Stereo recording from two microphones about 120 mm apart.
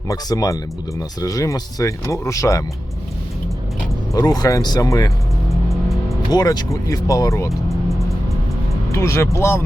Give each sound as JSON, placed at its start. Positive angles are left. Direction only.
{"t": 0.1, "sound": "speech", "side_deg": 30}
{"t": 4.1, "sound": "speech", "side_deg": 30}
{"t": 6.3, "sound": "speech", "side_deg": 35}
{"t": 8.9, "sound": "speech", "side_deg": 25}